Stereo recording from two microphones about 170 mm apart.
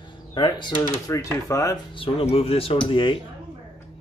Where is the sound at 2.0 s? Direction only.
35° left (ahead or behind).